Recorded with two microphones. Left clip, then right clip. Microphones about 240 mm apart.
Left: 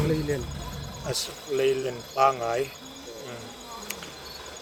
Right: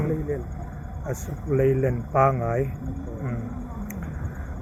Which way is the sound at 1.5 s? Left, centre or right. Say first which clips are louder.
Right 3 dB; centre.